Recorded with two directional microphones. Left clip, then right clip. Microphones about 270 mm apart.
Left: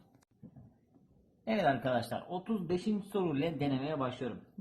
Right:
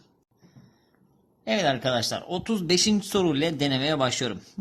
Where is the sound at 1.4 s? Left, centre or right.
Right.